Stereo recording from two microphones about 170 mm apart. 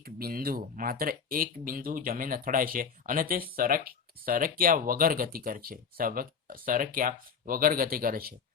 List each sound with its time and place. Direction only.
0.0 s speech: 60° right (ahead or behind)